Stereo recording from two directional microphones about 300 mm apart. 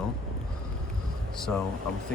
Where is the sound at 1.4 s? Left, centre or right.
Centre.